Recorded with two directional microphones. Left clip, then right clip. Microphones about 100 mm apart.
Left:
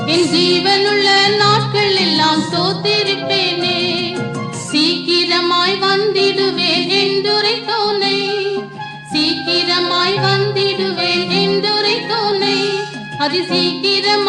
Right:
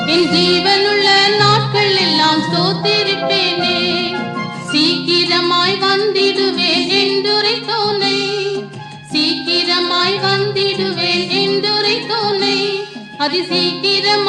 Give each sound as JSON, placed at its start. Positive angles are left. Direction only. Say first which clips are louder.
{"t": 0.1, "sound": "music", "louder": "even", "side_deg": -20}